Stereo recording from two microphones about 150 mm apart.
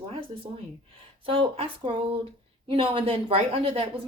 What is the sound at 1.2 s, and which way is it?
Speech, 40° right (ahead or behind).